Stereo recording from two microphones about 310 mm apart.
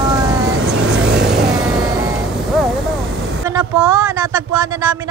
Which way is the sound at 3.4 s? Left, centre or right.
Centre.